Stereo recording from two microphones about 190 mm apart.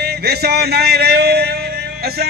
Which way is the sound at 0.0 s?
60° right (ahead or behind).